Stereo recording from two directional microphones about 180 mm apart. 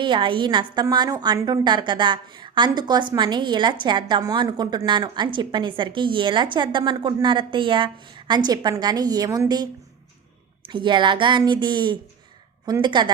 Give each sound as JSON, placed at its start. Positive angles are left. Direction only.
{"t": 0.0, "sound": "a woman's voice", "side_deg": -25}
{"t": 10.7, "sound": "a woman's voice", "side_deg": -25}